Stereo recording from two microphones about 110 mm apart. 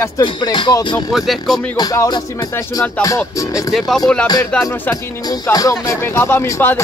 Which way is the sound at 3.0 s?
30° left (ahead or behind).